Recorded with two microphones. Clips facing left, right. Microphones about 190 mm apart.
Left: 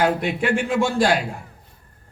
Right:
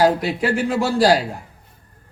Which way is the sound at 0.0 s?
35° right (ahead or behind).